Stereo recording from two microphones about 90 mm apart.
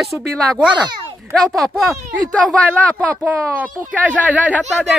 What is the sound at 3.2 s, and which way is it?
Speech, 15° right (ahead or behind).